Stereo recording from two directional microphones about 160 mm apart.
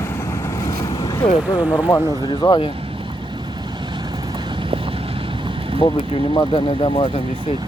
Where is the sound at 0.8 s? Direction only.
20° left (ahead or behind).